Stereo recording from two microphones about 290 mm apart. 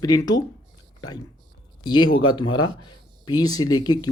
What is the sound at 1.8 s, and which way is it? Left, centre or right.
Speech, centre.